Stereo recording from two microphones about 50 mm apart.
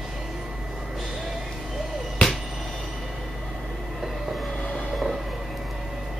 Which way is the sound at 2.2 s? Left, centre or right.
Centre.